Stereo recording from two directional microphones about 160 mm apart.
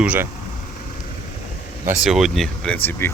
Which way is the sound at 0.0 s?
10° right (ahead or behind).